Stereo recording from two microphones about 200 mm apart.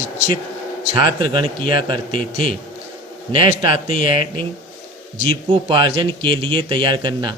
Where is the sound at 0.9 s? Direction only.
20° right (ahead or behind).